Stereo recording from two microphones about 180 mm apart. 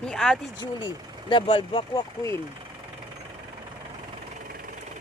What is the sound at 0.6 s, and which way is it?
Speech, 25° left (ahead or behind).